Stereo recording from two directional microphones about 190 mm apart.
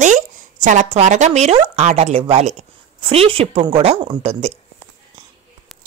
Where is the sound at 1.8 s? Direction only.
35° right (ahead or behind).